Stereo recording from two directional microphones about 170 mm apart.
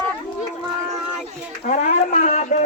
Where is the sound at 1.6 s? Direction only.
45° left (ahead or behind).